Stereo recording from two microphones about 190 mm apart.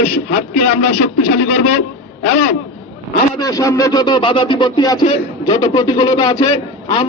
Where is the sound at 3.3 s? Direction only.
20° left (ahead or behind).